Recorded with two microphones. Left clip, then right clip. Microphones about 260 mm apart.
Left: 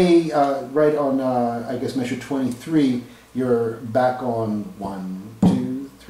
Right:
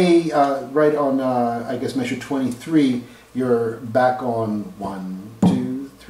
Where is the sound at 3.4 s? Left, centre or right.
Centre.